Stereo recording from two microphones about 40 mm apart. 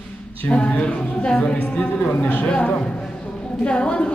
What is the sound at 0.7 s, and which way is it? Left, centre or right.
Speech, left.